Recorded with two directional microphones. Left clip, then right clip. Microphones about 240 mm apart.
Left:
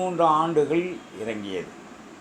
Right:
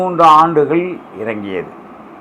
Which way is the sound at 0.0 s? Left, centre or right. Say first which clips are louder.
Right 13 dB; centre.